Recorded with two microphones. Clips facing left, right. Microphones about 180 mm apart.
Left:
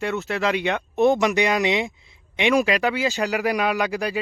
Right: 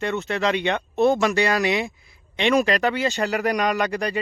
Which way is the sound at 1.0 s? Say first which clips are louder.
Left 1 dB; 15° left (ahead or behind).